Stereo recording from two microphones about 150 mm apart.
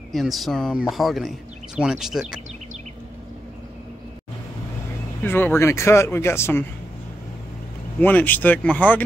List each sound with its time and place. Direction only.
0.1 s speech: centre (ahead or behind)
5.2 s speech: 15° left (ahead or behind)
8.0 s speech: 10° left (ahead or behind)